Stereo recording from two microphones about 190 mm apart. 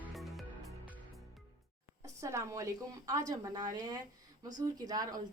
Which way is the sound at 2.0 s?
15° right (ahead or behind).